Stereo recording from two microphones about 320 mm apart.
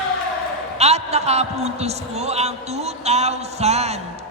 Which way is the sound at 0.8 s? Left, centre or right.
Centre.